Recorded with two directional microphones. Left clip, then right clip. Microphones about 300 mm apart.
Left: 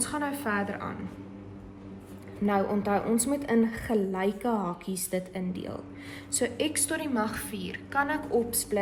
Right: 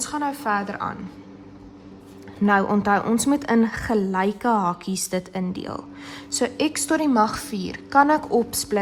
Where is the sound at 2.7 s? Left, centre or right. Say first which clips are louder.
Right 7 dB; right.